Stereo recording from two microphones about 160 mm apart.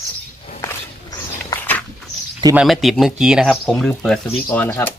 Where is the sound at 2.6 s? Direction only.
Centre (ahead or behind).